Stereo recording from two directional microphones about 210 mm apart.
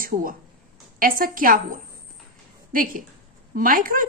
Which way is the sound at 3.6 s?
40° right (ahead or behind).